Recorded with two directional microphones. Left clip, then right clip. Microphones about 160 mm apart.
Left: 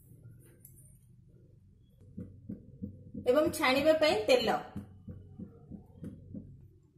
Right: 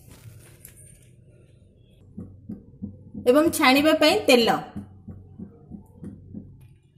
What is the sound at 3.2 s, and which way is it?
A woman's voice, 60° right (ahead or behind).